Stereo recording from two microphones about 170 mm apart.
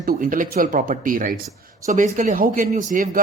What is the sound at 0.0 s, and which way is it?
A man's voice, 55° right (ahead or behind).